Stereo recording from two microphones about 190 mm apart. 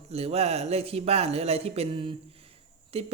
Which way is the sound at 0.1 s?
35° right (ahead or behind).